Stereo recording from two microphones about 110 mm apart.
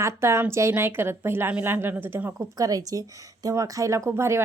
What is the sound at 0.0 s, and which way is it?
Speech, 25° right (ahead or behind).